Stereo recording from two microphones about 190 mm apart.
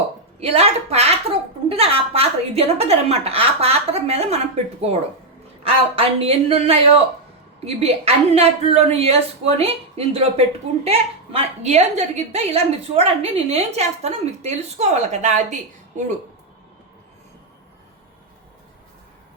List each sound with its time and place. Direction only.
0.3 s a woman's voice: 35° right (ahead or behind)